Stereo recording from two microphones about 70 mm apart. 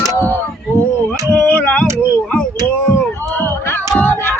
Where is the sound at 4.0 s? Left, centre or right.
Left.